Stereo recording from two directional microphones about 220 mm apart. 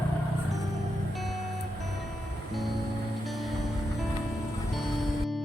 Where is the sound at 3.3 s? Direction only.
Centre (ahead or behind).